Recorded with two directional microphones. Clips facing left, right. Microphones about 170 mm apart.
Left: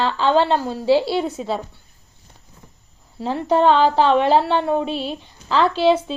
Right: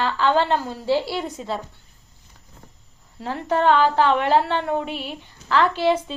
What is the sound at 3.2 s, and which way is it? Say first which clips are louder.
A woman's voice: left 4 dB; 25° left (ahead or behind).